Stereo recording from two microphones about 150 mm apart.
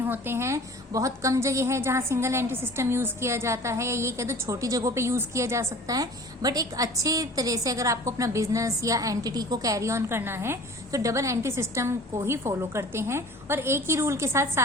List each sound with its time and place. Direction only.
0.0 s a woman's voice: 15° right (ahead or behind)